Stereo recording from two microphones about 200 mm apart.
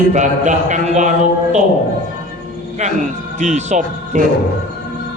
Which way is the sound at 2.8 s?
35° right (ahead or behind).